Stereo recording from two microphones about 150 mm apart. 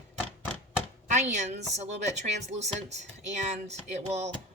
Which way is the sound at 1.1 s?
50° right (ahead or behind).